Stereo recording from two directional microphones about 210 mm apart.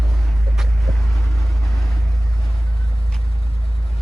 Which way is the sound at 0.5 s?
Centre (ahead or behind).